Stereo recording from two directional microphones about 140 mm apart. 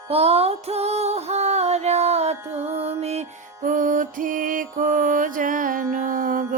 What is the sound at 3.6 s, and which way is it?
Music, 70° right (ahead or behind).